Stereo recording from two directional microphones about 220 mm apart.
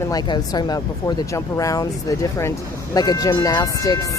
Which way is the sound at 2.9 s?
15° left (ahead or behind).